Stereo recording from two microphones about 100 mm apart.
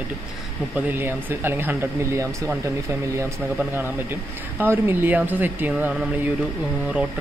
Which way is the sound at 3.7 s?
20° right (ahead or behind).